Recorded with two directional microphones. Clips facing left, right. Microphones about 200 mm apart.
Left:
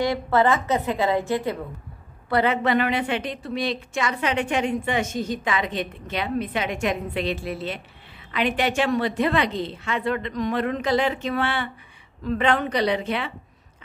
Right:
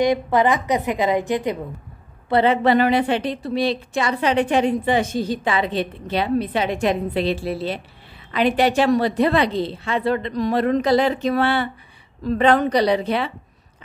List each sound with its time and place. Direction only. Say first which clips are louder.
0.0 s a woman's voice: right 3 dB; 15° right (ahead or behind)
2.2 s a woman's voice: right 5 dB; 25° right (ahead or behind)